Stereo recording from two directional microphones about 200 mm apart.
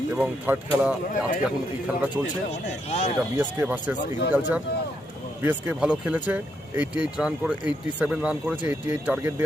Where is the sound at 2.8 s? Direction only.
35° left (ahead or behind).